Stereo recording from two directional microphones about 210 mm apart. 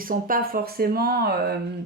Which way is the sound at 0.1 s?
40° right (ahead or behind).